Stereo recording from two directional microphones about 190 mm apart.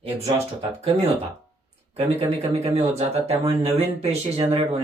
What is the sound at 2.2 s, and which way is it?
Speech, 25° right (ahead or behind).